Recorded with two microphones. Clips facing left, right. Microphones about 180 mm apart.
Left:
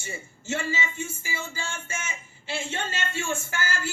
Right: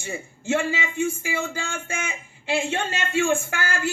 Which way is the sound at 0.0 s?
60° right (ahead or behind).